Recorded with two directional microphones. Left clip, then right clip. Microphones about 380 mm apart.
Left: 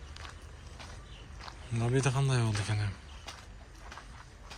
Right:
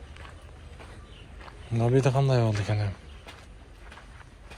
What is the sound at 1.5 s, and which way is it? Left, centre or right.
A man's voice, centre.